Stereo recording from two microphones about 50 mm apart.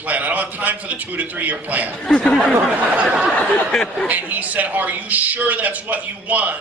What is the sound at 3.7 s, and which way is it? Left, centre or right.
Speech, centre.